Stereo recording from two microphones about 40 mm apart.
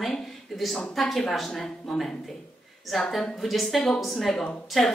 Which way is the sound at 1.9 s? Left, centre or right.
Centre.